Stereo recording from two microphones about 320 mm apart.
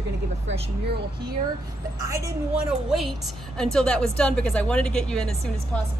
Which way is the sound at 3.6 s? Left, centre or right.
Centre.